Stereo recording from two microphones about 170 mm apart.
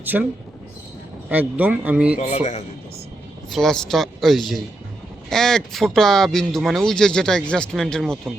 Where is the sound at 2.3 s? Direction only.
40° left (ahead or behind).